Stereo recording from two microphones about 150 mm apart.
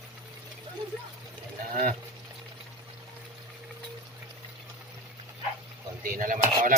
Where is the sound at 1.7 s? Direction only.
65° right (ahead or behind).